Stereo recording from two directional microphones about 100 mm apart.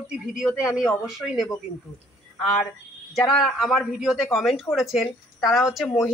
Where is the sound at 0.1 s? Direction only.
10° right (ahead or behind).